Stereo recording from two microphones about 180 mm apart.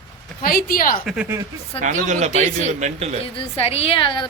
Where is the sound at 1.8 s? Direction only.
45° right (ahead or behind).